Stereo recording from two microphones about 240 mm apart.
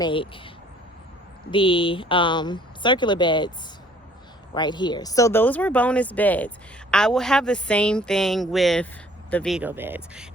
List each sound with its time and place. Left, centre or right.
0.0 s speech: left
4.5 s a woman's voice: centre